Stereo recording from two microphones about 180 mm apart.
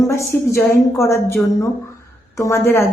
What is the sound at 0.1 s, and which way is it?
A woman's voice, 15° left (ahead or behind).